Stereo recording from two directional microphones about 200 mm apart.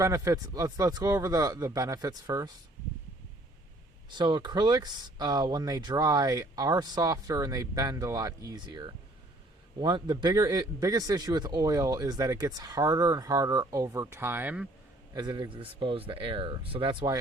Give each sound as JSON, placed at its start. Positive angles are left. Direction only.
{"t": 0.0, "sound": "a man's voice", "side_deg": -15}
{"t": 4.1, "sound": "a man's voice", "side_deg": -20}
{"t": 15.1, "sound": "a man's voice", "side_deg": -20}